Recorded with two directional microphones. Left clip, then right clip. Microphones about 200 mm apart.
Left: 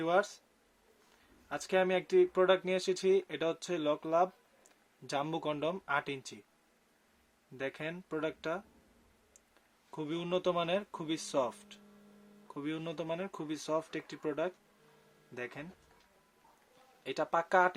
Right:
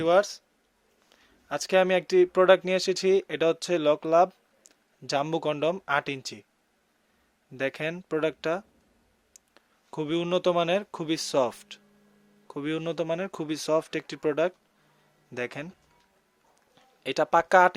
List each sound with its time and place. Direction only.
0.0 s speech: 45° right (ahead or behind)
1.5 s speech: 45° right (ahead or behind)
7.5 s speech: 45° right (ahead or behind)
17.0 s speech: 45° right (ahead or behind)